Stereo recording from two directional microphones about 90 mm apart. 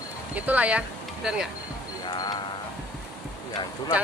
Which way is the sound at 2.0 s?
50° left (ahead or behind).